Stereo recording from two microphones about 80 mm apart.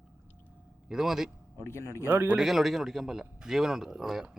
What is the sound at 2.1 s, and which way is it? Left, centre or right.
Speech, right.